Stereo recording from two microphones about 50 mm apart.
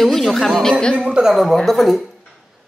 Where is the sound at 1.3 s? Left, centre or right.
Centre.